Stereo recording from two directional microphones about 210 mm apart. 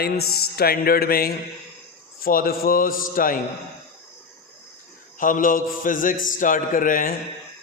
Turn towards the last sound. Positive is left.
turn(degrees=40)  # may be behind; listen again after turning